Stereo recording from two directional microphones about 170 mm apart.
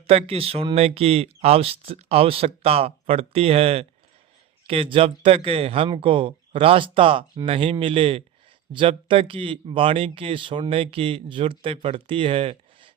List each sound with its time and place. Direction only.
0.1 s speech: 35° right (ahead or behind)